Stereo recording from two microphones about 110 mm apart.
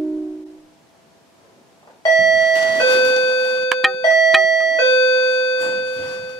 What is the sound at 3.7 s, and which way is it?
Doorbell, centre (ahead or behind).